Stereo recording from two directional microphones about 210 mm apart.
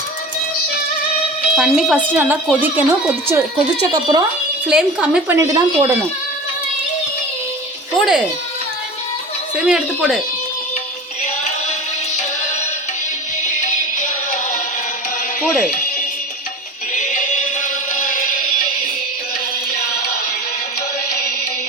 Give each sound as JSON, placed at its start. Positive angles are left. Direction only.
{"t": 1.5, "sound": "speech", "side_deg": 0}
{"t": 4.7, "sound": "a woman's voice", "side_deg": -5}
{"t": 7.9, "sound": "a woman's voice", "side_deg": 0}
{"t": 9.6, "sound": "a woman's voice", "side_deg": -5}
{"t": 13.4, "sound": "music", "side_deg": 35}
{"t": 15.6, "sound": "music", "side_deg": 40}
{"t": 17.6, "sound": "music", "side_deg": 40}